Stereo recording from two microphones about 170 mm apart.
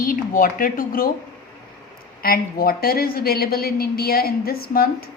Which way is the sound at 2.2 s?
60° left (ahead or behind).